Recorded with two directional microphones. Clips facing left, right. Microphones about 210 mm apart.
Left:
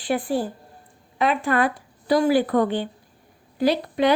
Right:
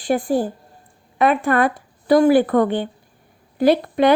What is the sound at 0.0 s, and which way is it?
Speech, 45° right (ahead or behind).